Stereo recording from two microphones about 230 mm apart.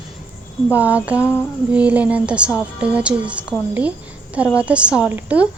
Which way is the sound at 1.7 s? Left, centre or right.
Centre.